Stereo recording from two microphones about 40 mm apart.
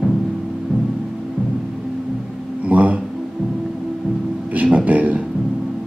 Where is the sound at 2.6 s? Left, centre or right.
Right.